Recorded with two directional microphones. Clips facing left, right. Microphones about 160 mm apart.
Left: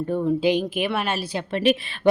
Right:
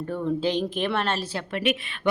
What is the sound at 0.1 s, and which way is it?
Speech, 15° left (ahead or behind).